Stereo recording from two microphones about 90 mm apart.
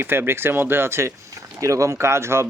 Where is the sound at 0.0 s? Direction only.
25° right (ahead or behind).